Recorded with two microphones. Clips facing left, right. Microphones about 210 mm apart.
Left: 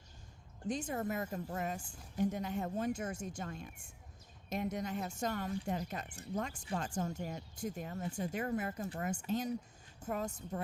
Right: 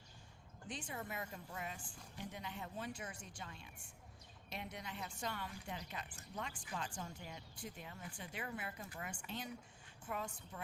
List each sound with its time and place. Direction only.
0.7 s a woman's voice: 45° left (ahead or behind)